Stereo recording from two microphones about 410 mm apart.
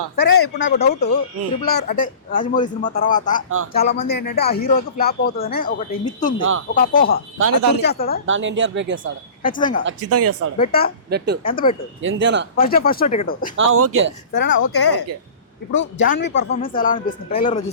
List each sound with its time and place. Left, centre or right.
0.2 s speech: left
7.3 s speech: right
7.8 s speech: left
8.3 s speech: right
9.4 s speech: centre
9.8 s speech: right
10.6 s speech: left
12.0 s speech: right
12.5 s speech: left
13.6 s speech: right
14.3 s speech: left